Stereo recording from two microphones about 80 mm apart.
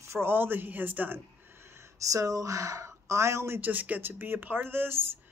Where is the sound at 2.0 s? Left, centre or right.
Right.